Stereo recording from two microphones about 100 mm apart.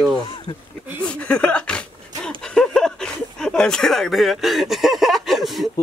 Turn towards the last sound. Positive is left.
turn(degrees=0)  # may be behind; listen again after turning